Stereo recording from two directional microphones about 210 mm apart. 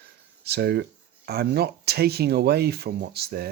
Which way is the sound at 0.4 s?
50° right (ahead or behind).